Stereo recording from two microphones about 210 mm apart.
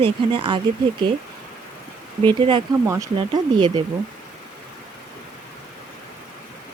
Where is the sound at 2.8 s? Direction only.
10° right (ahead or behind).